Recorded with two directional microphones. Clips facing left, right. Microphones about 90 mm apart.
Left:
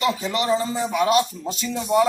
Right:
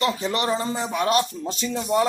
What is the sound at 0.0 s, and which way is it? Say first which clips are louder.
A man's voice: left 1 dB; 40° right (ahead or behind).